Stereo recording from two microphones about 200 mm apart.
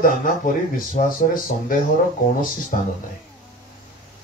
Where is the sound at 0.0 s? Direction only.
40° left (ahead or behind).